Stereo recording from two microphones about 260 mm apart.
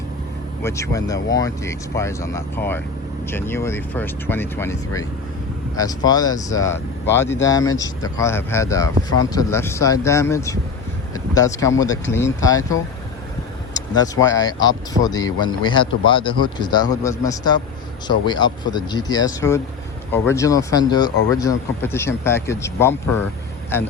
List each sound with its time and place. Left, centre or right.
0.6 s speech: centre
13.9 s speech: centre